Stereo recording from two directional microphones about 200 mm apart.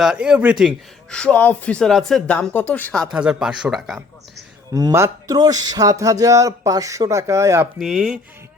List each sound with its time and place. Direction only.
0.0 s speech: 5° right (ahead or behind)
4.7 s speech: 15° right (ahead or behind)
7.8 s speech: centre (ahead or behind)